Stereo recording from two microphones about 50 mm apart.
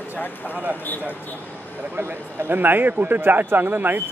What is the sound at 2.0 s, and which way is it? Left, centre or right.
A man's voice, right.